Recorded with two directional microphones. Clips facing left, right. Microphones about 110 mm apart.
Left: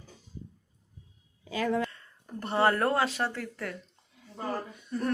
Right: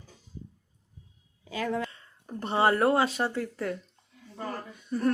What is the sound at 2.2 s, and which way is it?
Speech, 20° right (ahead or behind).